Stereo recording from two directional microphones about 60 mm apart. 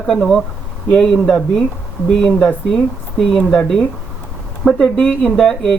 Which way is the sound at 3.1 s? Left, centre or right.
Centre.